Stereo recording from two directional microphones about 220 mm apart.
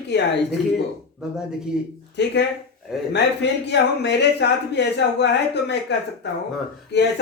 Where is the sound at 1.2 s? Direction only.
5° right (ahead or behind).